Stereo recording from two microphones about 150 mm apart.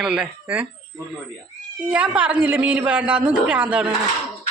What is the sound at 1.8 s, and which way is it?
A woman's voice, 10° right (ahead or behind).